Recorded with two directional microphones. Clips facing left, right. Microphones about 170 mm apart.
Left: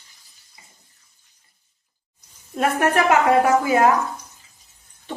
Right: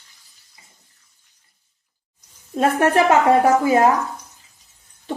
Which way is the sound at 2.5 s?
25° right (ahead or behind).